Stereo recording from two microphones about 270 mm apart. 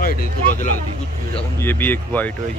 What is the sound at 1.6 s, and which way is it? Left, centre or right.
Speech, centre.